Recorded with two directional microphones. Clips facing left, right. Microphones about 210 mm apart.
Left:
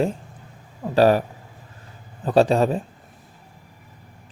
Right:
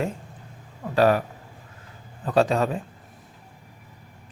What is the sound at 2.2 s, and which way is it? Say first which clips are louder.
Speech: left 4 dB; 30° left (ahead or behind).